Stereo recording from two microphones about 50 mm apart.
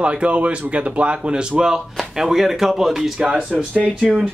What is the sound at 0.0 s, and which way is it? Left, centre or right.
Speech, right.